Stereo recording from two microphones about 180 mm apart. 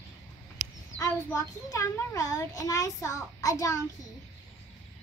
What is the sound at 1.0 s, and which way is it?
A child's voice, 15° left (ahead or behind).